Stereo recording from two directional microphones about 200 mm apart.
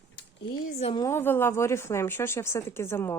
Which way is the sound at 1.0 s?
10° left (ahead or behind).